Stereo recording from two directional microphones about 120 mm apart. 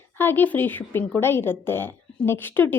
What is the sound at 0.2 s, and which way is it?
A woman's voice, 15° left (ahead or behind).